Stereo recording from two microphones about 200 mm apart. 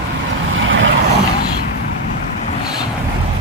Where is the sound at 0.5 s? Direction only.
75° right (ahead or behind).